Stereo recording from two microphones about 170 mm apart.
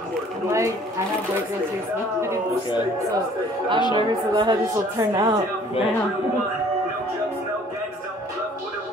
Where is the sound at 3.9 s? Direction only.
25° right (ahead or behind).